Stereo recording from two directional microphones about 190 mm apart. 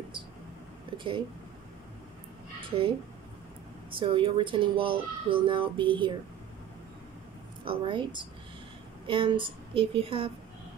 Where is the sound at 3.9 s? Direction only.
25° right (ahead or behind).